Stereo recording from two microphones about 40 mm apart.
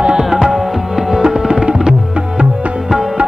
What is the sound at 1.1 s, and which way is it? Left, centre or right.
Tabla, centre.